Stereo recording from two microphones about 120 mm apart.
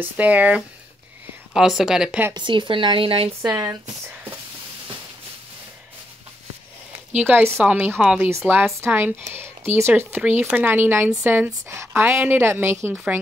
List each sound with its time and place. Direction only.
0.0 s speech: 15° right (ahead or behind)
2.3 s speech: 40° right (ahead or behind)
3.4 s speech: 15° right (ahead or behind)
7.1 s speech: 10° right (ahead or behind)